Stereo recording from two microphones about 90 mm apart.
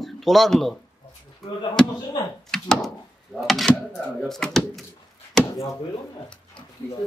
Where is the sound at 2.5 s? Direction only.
5° left (ahead or behind).